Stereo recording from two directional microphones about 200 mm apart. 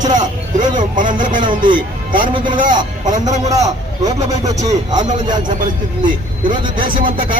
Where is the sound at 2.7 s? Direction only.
40° right (ahead or behind).